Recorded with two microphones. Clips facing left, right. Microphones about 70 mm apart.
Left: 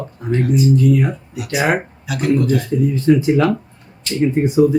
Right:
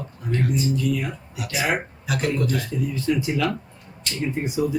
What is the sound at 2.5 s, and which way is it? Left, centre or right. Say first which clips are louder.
Speech: left 8 dB; left.